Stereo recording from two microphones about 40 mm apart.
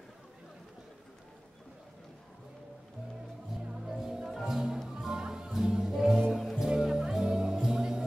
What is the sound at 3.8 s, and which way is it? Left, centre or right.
Music, centre.